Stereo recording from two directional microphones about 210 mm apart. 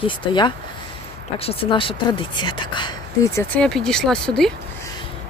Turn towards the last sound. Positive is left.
turn(degrees=0)  # may be behind; listen again after turning